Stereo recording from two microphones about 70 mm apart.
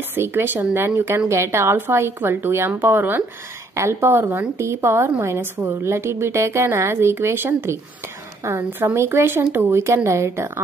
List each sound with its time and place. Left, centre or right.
0.1 s a woman's voice: right
8.8 s a woman's voice: right